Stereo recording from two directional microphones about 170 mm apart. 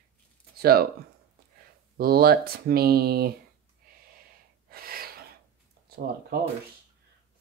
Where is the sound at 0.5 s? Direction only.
65° right (ahead or behind).